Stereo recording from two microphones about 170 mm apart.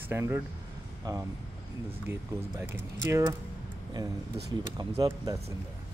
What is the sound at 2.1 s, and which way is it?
Speech, 15° right (ahead or behind).